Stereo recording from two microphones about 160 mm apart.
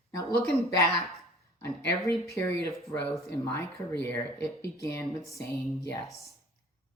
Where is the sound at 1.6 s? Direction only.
15° left (ahead or behind).